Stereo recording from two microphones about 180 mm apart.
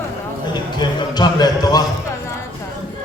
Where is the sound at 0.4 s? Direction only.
25° left (ahead or behind).